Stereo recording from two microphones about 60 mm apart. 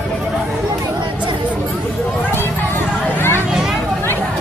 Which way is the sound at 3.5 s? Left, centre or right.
Centre.